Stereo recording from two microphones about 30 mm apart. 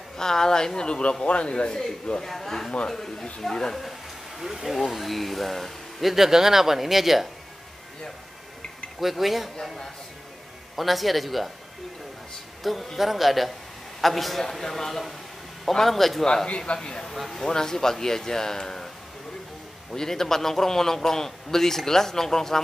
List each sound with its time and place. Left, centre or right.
0.2 s a woman's voice: centre
0.7 s a man's voice: left
2.2 s a man's voice: centre
4.4 s speech: centre
4.7 s speech: centre
6.1 s speech: centre
9.0 s speech: centre
10.8 s speech: centre
12.6 s a man's voice: centre
16.4 s a man's voice: left
16.7 s a woman's voice: left
17.0 s a man's voice: centre
19.9 s a man's voice: centre